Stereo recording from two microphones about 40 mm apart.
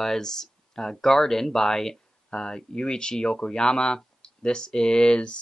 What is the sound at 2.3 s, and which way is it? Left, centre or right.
Speech, left.